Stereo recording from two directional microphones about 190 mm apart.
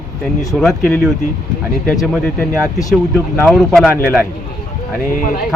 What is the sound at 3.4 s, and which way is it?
Speech, centre (ahead or behind).